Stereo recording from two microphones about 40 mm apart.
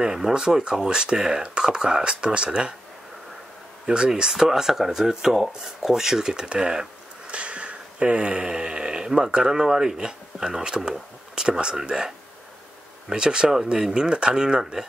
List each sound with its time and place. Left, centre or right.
0.0 s speech: centre
3.8 s speech: right
4.1 s speech: centre
7.2 s speech: right
13.1 s speech: right